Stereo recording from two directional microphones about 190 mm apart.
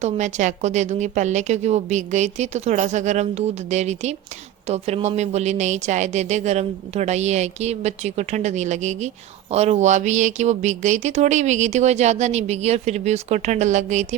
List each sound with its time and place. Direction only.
0.0 s speech: 40° right (ahead or behind)